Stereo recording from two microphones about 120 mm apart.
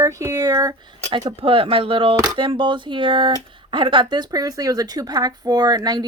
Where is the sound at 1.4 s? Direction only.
50° right (ahead or behind).